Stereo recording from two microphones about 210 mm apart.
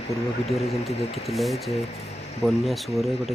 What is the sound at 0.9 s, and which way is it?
Speech, 30° left (ahead or behind).